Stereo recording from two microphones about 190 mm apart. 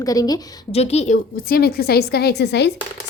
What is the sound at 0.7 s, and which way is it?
A woman's voice, 35° left (ahead or behind).